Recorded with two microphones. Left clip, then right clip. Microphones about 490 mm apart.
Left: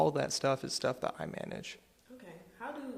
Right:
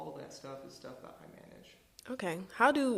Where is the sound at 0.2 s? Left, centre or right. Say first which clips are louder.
Left 14 dB; left.